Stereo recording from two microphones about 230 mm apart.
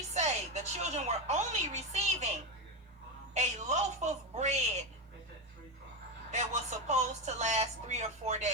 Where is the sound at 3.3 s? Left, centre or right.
Right.